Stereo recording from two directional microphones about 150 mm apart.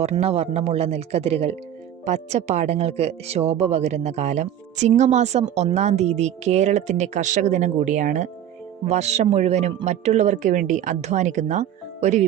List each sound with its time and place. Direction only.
0.0 s speech: 45° right (ahead or behind)